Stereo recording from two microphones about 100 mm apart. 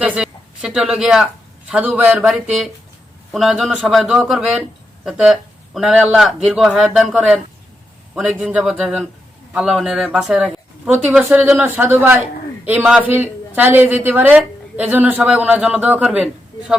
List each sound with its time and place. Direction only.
0.0 s a woman's voice: 10° right (ahead or behind)
8.1 s a woman's voice: 10° right (ahead or behind)
11.1 s a woman's voice: 15° right (ahead or behind)
11.4 s a man's voice: 5° right (ahead or behind)
11.7 s a woman's voice: 20° right (ahead or behind)